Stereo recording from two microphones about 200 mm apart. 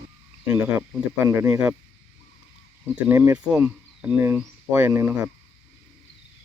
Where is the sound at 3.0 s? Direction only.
10° right (ahead or behind).